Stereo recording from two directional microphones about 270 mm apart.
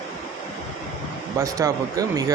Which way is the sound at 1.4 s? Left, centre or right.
Centre.